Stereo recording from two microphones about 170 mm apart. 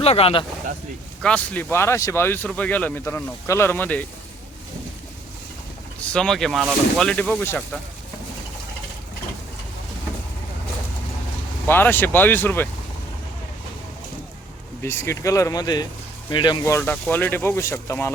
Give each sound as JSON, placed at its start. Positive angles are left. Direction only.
{"t": 0.0, "sound": "speech", "side_deg": 35}
{"t": 1.2, "sound": "speech", "side_deg": 5}
{"t": 6.0, "sound": "speech", "side_deg": 5}
{"t": 11.6, "sound": "speech", "side_deg": 10}
{"t": 14.8, "sound": "speech", "side_deg": 15}
{"t": 16.7, "sound": "speech", "side_deg": 10}